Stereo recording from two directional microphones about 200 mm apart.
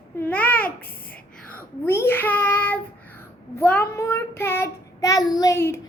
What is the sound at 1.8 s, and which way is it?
Child singing, 10° left (ahead or behind).